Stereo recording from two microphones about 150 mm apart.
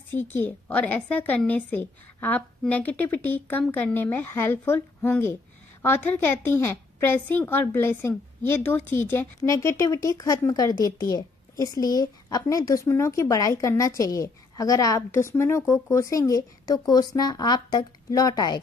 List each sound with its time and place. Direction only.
0.1 s a woman's voice: 15° left (ahead or behind)